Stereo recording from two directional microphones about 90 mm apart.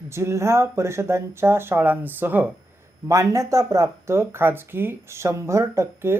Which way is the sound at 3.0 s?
35° right (ahead or behind).